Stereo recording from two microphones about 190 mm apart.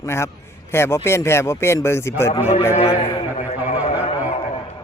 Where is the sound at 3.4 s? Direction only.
35° left (ahead or behind).